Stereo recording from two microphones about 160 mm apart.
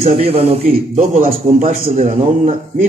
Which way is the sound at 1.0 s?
50° right (ahead or behind).